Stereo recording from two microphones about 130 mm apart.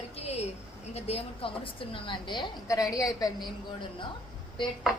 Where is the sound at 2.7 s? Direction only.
25° left (ahead or behind).